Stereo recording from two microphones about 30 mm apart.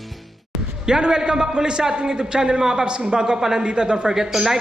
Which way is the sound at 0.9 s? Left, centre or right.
Right.